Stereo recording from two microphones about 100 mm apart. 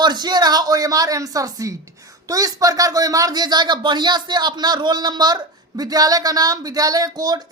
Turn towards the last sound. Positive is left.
turn(degrees=-40)  # may be behind; listen again after turning